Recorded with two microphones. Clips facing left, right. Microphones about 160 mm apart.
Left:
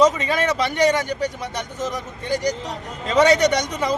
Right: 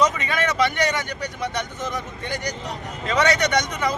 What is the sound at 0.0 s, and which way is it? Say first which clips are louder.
A man's voice: left 4 dB; 35° left (ahead or behind).